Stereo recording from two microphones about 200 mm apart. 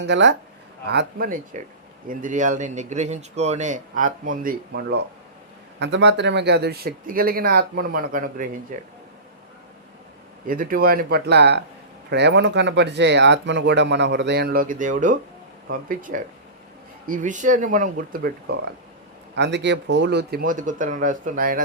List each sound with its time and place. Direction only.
0.0 s speech: 60° right (ahead or behind); by 8.8 s 45° right (ahead or behind)
10.4 s speech: 45° right (ahead or behind)